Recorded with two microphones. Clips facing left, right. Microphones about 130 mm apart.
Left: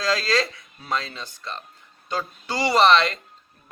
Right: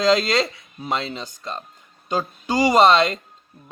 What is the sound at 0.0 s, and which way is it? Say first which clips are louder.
A man's voice: right 5 dB; 25° right (ahead or behind).